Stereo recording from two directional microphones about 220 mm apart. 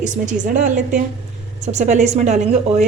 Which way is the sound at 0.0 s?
35° right (ahead or behind).